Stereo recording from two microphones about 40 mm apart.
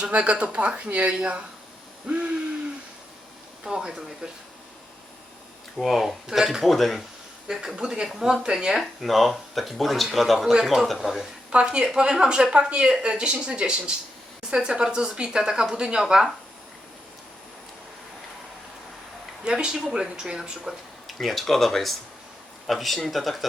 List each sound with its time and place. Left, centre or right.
0.1 s speech: right
2.0 s a sound: right
3.6 s speech: centre
5.7 s speech: centre
6.6 s speech: centre
7.4 s a woman's voice: centre
8.0 s speech: centre
8.8 s speech: centre
11.5 s a woman's voice: right
19.5 s a woman's voice: right
21.1 s speech: centre